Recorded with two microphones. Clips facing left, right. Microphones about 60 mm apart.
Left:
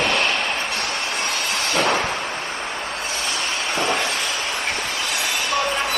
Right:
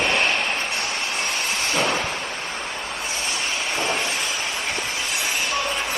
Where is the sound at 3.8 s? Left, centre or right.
Left.